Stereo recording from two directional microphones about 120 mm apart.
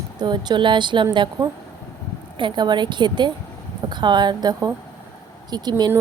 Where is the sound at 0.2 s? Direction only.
40° right (ahead or behind).